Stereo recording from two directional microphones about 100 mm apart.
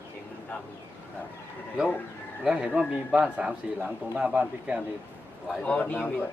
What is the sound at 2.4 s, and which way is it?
A man's voice, 10° right (ahead or behind).